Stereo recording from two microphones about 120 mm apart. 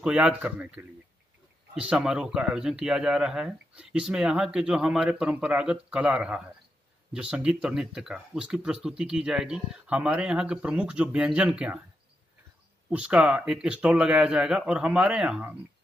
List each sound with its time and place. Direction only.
0.0 s speech: 10° right (ahead or behind)
12.9 s speech: 10° right (ahead or behind)